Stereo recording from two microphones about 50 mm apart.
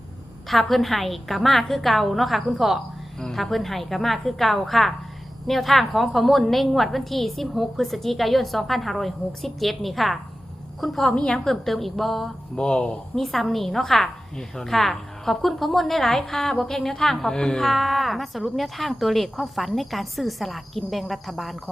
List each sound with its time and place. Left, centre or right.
0.4 s a woman's voice: centre
3.2 s a woman's voice: centre
11.1 s a woman's voice: centre
12.5 s speech: left
13.1 s a woman's voice: centre
17.6 s a woman's voice: centre